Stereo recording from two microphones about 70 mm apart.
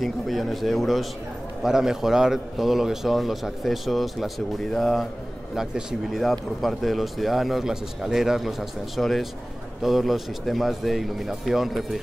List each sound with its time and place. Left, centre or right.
0.0 s a man's voice: centre
5.6 s a man's voice: centre